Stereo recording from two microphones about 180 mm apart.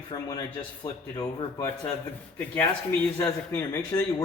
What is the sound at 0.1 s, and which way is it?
A man's voice, 20° left (ahead or behind).